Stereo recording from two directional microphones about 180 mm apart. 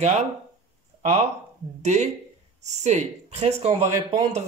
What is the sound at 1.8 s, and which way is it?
Speech, 40° right (ahead or behind).